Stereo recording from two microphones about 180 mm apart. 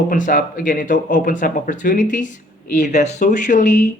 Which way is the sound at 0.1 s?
50° left (ahead or behind).